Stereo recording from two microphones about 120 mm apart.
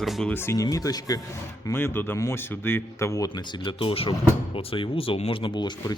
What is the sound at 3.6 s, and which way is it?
Speech, 50° left (ahead or behind).